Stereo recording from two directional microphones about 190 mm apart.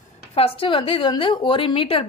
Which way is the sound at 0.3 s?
30° left (ahead or behind).